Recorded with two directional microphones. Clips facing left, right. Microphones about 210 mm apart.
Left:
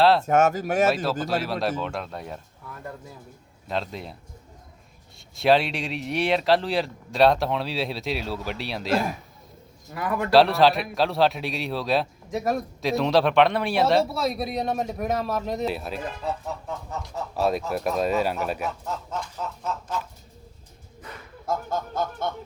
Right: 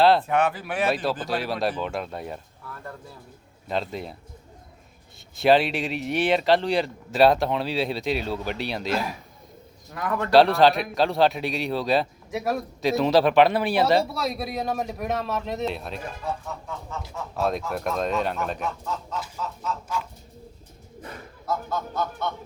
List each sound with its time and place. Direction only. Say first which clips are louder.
0.3 s honk: left 3 dB; 45° left (ahead or behind)
1.2 s a man's voice: even; centre (ahead or behind)
3.7 s a man's voice: right 1 dB; centre (ahead or behind)
5.4 s a man's voice: right 1 dB; centre (ahead or behind)
17.0 s a man's voice: left 1 dB; centre (ahead or behind)
21.4 s honk: left 1 dB; 45° left (ahead or behind)